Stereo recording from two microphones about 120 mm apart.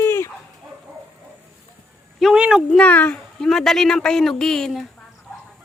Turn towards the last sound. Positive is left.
turn(degrees=5)  # may be behind; listen again after turning